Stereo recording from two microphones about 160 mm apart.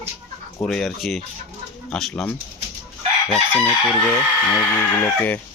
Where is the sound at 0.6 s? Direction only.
5° left (ahead or behind).